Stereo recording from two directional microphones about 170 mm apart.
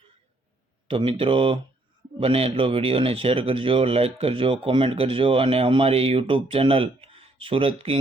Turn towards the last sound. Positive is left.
turn(degrees=-35)  # may be behind; listen again after turning